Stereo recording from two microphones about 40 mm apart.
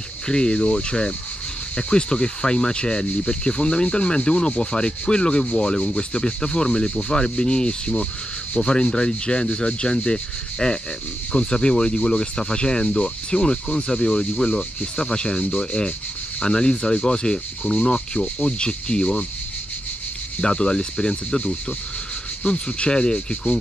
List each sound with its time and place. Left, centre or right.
0.3 s rub: centre
20.3 s rub: left
22.4 s rub: left